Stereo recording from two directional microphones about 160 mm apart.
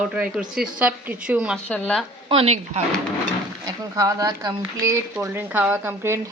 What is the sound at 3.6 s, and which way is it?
Speech, 20° right (ahead or behind).